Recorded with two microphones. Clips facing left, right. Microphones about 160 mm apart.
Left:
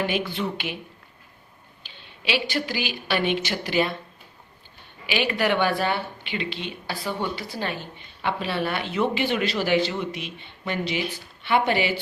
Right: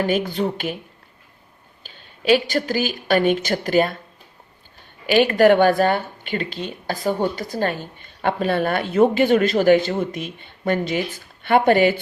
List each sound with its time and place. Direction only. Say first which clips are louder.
0.0 s speech: right 5 dB; 45° right (ahead or behind)
1.8 s a woman's voice: right 9 dB; 45° right (ahead or behind)
5.0 s speech: right 10 dB; 45° right (ahead or behind)